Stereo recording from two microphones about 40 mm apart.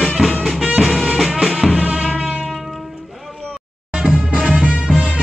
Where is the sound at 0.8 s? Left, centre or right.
Centre.